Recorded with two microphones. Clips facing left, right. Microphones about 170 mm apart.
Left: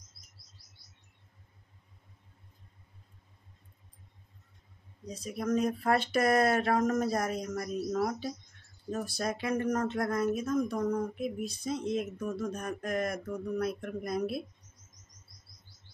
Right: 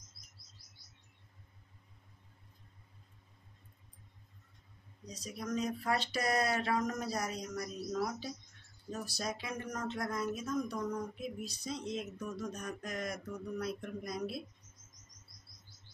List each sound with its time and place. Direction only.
5.0 s speech: 55° left (ahead or behind)